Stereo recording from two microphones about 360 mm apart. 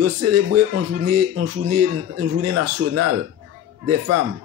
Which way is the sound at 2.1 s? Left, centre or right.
Right.